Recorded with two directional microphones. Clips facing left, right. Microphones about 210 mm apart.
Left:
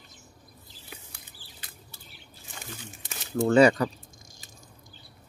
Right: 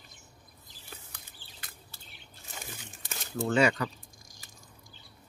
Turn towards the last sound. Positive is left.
turn(degrees=35)  # may be behind; listen again after turning